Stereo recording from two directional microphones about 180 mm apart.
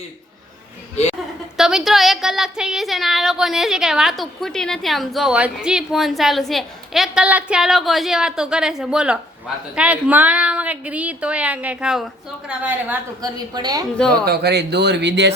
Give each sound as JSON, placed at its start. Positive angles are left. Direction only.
{"t": 1.5, "sound": "speech", "side_deg": 0}
{"t": 13.2, "sound": "a woman's voice", "side_deg": -20}
{"t": 14.3, "sound": "speech", "side_deg": -65}